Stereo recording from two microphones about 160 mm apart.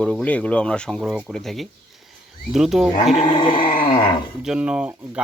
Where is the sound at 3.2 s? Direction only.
35° left (ahead or behind).